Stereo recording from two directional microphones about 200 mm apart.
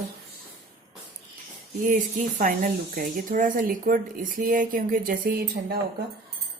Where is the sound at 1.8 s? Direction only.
40° right (ahead or behind).